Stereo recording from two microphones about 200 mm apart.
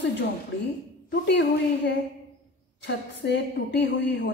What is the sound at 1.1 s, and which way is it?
Speech, 60° left (ahead or behind).